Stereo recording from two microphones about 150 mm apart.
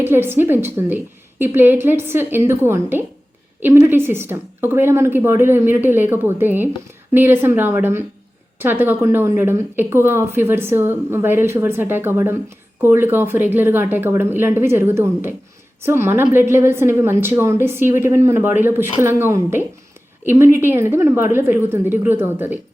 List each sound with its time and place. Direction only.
0.0 s speech: 15° right (ahead or behind)